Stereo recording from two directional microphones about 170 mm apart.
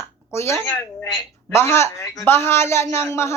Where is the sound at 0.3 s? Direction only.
15° left (ahead or behind).